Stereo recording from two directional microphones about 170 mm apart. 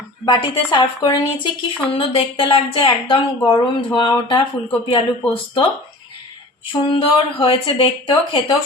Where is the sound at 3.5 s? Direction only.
25° left (ahead or behind).